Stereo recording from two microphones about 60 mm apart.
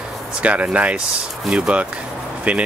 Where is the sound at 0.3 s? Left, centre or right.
Right.